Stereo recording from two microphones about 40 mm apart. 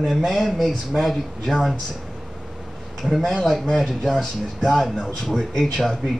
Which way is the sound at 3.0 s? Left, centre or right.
Centre.